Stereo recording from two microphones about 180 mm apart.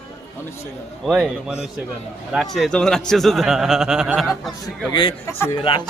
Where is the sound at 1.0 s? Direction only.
5° right (ahead or behind).